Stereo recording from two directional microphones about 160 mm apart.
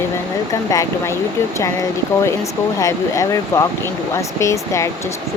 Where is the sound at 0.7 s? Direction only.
20° left (ahead or behind).